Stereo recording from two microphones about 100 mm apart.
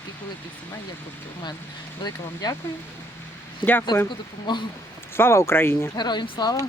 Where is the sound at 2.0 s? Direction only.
40° left (ahead or behind).